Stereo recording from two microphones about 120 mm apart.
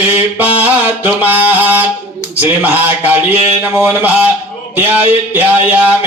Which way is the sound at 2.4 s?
15° right (ahead or behind).